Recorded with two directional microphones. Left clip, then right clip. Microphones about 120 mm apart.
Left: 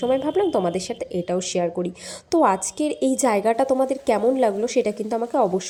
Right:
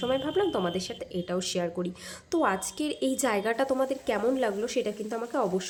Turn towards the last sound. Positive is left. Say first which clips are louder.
# left 8 dB
turn(degrees=30)  # may be behind; listen again after turning